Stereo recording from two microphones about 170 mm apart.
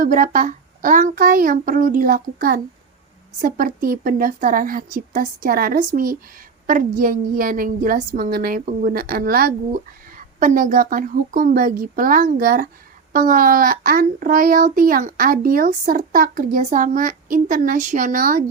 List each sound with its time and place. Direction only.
0.0 s a child's voice: 50° right (ahead or behind)